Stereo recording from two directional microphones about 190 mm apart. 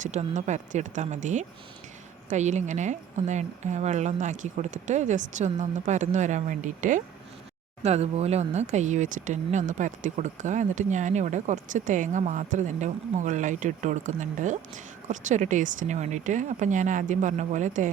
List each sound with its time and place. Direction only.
0.0 s speech: 40° right (ahead or behind)